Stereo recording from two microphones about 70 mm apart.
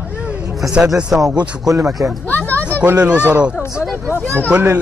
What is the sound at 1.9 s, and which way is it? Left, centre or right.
Speech, centre.